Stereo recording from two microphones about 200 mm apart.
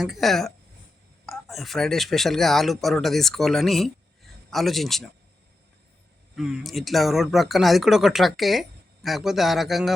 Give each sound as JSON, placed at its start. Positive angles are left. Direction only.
{"t": 0.0, "sound": "speech", "side_deg": 0}
{"t": 6.3, "sound": "speech", "side_deg": 0}